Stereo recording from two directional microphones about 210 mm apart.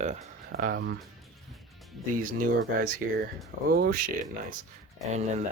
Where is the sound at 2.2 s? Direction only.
40° right (ahead or behind).